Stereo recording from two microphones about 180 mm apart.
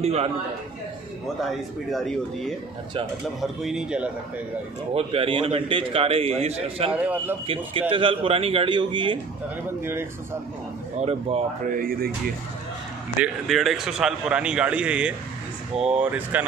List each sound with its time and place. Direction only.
0.0 s a man's voice: 35° right (ahead or behind)
1.4 s a man's voice: centre (ahead or behind)
4.9 s a man's voice: 30° right (ahead or behind)
6.9 s speech: 10° right (ahead or behind)
7.4 s a man's voice: 30° right (ahead or behind)
9.8 s speech: 10° right (ahead or behind)
11.0 s a man's voice: 35° right (ahead or behind)
11.7 s speech: 50° right (ahead or behind)
13.2 s a man's voice: centre (ahead or behind)